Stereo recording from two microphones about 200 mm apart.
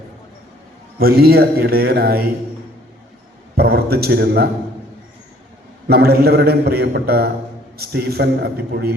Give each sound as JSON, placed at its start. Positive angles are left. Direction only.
{"t": 0.9, "sound": "a man's voice", "side_deg": -50}
{"t": 3.6, "sound": "a man's voice", "side_deg": -50}
{"t": 5.9, "sound": "a man's voice", "side_deg": -50}